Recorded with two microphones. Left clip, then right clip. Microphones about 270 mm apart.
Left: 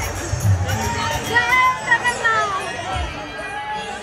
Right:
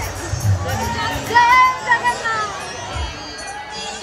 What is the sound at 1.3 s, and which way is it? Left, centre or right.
Music, right.